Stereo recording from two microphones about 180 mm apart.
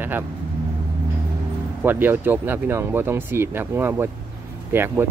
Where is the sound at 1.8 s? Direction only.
10° right (ahead or behind).